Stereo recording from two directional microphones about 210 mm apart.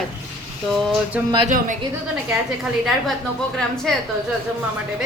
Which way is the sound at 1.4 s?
40° right (ahead or behind).